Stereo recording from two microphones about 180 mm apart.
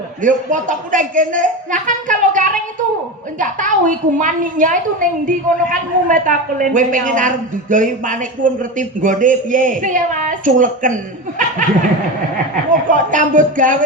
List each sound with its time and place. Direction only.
0.2 s a woman's voice: 45° right (ahead or behind)
11.3 s laughter: 45° right (ahead or behind)
12.9 s a woman's voice: 45° right (ahead or behind)